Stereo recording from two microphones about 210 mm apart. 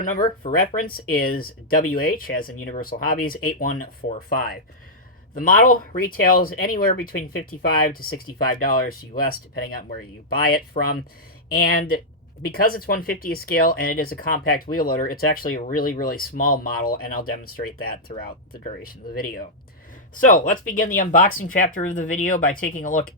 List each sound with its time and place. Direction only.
0.0 s speech: 40° left (ahead or behind)
8.5 s speech: 40° left (ahead or behind)